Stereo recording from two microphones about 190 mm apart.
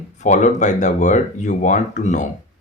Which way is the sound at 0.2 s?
40° left (ahead or behind).